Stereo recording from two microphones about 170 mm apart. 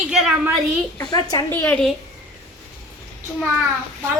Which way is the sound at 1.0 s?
25° left (ahead or behind).